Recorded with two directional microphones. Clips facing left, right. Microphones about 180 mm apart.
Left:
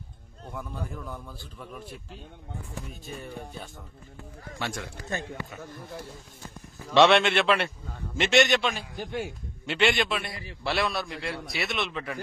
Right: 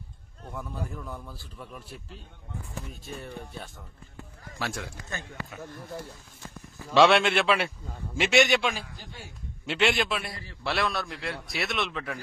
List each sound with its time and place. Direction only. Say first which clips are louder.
0.6 s a man's voice: right 1 dB; centre (ahead or behind)
6.9 s a man's voice: left 1 dB; centre (ahead or behind)
10.3 s a man's voice: left 3 dB; 15° left (ahead or behind)
10.6 s a man's voice: left 1 dB; centre (ahead or behind)